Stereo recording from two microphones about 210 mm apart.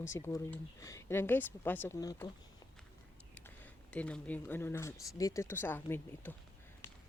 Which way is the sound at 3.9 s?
5° left (ahead or behind).